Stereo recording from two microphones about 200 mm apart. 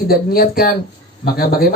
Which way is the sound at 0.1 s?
50° left (ahead or behind).